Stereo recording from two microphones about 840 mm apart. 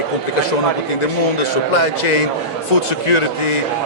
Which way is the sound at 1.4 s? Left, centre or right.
Left.